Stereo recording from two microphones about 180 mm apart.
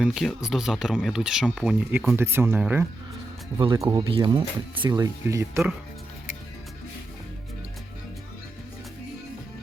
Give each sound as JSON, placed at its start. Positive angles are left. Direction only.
{"t": 0.0, "sound": "speech", "side_deg": 0}
{"t": 3.8, "sound": "speech", "side_deg": -25}